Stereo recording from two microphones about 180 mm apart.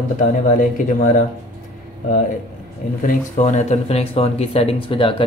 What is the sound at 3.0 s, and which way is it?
Speech, 45° left (ahead or behind).